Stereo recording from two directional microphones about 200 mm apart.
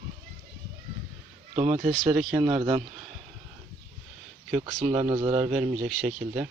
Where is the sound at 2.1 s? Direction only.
Centre (ahead or behind).